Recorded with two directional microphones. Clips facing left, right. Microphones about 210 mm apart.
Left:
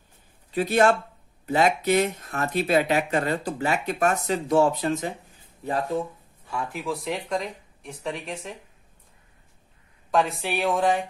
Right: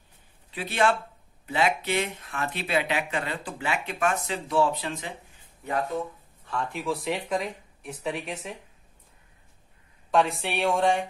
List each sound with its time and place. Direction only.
0.5 s speech: 40° left (ahead or behind)
6.4 s speech: 10° left (ahead or behind)
10.1 s speech: centre (ahead or behind)